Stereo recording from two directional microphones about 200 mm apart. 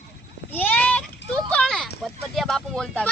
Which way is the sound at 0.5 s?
10° left (ahead or behind).